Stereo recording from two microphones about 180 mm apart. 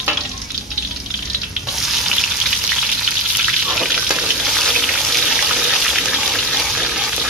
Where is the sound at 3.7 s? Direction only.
5° right (ahead or behind).